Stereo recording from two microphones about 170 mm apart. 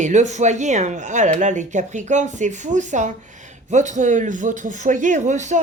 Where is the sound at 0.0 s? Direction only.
45° right (ahead or behind).